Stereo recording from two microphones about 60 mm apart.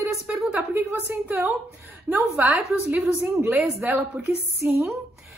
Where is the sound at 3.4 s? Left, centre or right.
Right.